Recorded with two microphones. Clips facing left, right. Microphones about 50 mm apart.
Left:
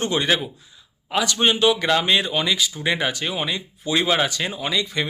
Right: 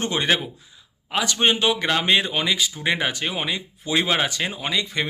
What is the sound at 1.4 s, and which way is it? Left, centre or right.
Speech, right.